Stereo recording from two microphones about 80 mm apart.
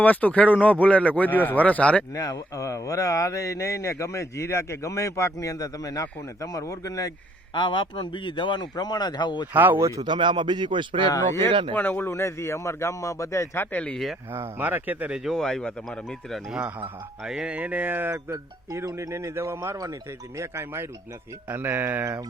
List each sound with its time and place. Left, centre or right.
0.0 s speech: centre
2.1 s speech: left
7.5 s speech: left
9.5 s music: right
10.0 s a man's voice: right
11.7 s speech: left
13.7 s speech: left
13.9 s speech: centre
14.3 s music: right
15.1 s speech: centre
16.5 s speech: centre
17.2 s music: centre
18.3 s speech: right
21.5 s music: right